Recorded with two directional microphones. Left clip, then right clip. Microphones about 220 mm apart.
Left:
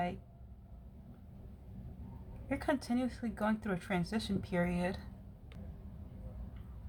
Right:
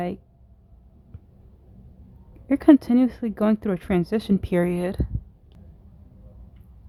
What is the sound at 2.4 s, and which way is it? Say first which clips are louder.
Speech: right 18 dB; 40° right (ahead or behind).